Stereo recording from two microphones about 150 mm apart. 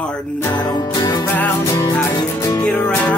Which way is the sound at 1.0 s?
30° left (ahead or behind).